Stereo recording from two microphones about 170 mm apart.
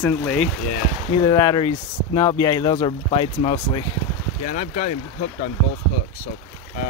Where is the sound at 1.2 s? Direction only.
20° left (ahead or behind).